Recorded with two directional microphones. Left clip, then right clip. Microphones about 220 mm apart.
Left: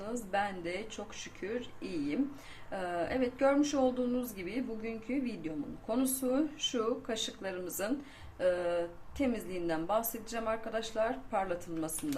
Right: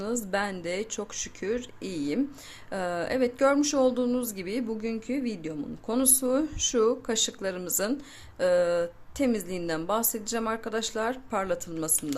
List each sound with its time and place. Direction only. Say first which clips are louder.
0.0 s speech: right 5 dB; 55° right (ahead or behind)